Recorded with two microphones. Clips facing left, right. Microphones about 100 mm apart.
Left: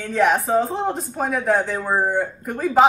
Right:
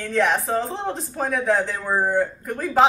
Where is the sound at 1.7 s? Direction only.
15° left (ahead or behind).